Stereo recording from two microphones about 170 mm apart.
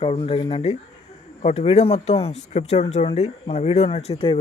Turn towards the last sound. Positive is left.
turn(degrees=35)  # may be behind; listen again after turning